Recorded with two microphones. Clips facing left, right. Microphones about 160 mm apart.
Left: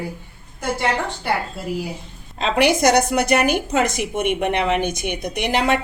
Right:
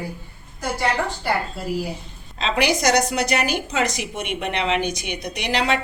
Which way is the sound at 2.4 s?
55° left (ahead or behind).